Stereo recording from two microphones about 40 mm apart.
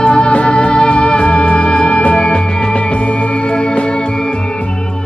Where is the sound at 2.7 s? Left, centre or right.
Left.